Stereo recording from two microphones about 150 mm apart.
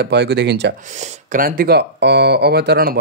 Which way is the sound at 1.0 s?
65° right (ahead or behind).